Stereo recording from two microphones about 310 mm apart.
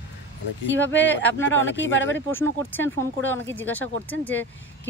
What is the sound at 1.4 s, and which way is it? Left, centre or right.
Speech, left.